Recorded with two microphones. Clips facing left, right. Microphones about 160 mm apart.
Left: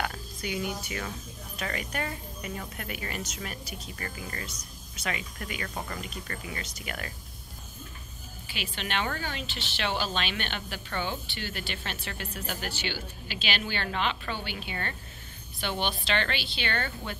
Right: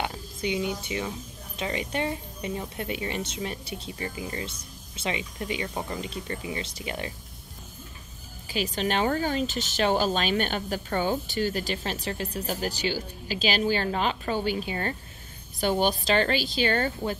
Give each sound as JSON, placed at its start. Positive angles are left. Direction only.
{"t": 0.0, "sound": "speech", "side_deg": -25}
{"t": 8.5, "sound": "speech", "side_deg": -40}